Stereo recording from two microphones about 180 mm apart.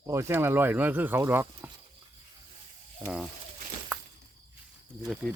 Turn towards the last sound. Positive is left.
turn(degrees=0)  # may be behind; listen again after turning